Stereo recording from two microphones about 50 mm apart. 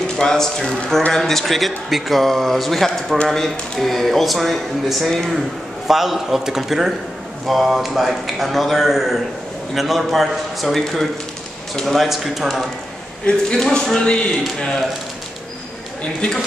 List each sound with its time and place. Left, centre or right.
0.2 s a man's voice: centre
13.2 s speech: centre
16.0 s a man's voice: centre